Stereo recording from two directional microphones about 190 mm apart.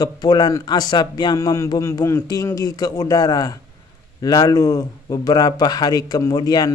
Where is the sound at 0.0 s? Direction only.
20° left (ahead or behind).